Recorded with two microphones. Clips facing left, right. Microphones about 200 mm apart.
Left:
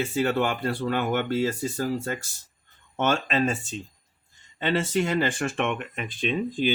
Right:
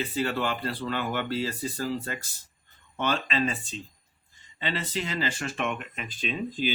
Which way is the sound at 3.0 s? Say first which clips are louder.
Left 4 dB; 50° left (ahead or behind).